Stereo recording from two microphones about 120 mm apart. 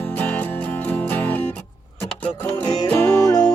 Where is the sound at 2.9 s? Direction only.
15° left (ahead or behind).